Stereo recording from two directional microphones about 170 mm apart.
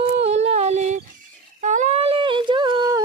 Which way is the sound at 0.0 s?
40° right (ahead or behind).